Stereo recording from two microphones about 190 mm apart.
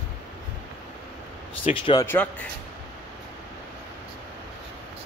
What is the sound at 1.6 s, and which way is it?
Speech, 25° left (ahead or behind).